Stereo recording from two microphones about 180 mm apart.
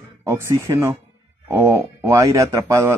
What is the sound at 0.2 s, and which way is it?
Speech, 15° right (ahead or behind).